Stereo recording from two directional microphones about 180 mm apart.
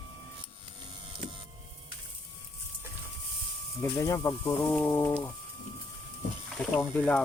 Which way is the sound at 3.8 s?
15° left (ahead or behind).